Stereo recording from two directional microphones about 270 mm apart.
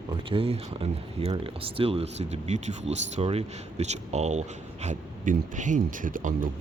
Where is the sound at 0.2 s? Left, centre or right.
Centre.